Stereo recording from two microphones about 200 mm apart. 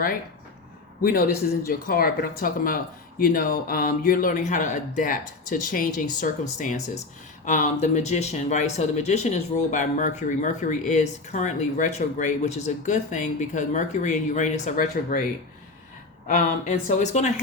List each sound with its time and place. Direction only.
1.6 s speech: 50° left (ahead or behind)
16.2 s speech: 35° left (ahead or behind)